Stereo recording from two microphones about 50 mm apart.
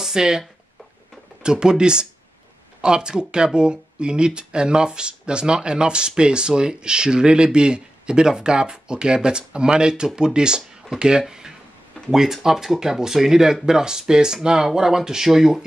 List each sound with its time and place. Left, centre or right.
0.0 s speech: centre
1.4 s speech: centre